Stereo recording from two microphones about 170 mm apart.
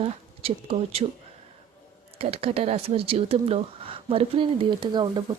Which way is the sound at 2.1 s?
35° right (ahead or behind).